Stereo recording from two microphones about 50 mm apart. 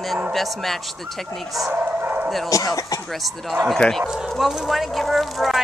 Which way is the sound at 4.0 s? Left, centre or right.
Centre.